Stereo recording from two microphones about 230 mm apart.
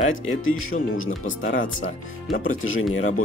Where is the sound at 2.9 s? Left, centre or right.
Left.